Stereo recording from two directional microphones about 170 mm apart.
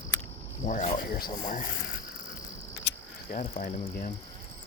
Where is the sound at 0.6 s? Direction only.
45° left (ahead or behind).